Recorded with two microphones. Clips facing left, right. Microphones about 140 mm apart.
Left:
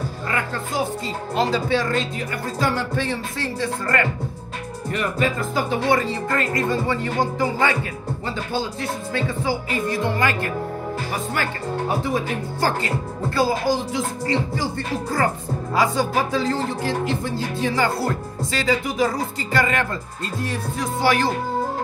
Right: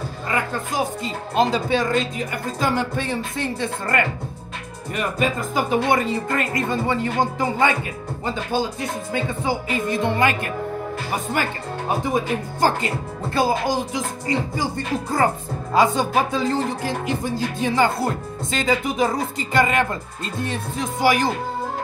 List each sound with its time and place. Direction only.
0.3 s speech: 20° right (ahead or behind)
12.0 s speech: 20° right (ahead or behind)